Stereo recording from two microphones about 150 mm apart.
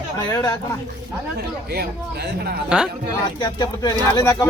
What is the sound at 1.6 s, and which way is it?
Speech, 90° right.